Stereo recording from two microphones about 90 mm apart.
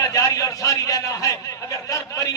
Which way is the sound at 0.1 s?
35° left (ahead or behind).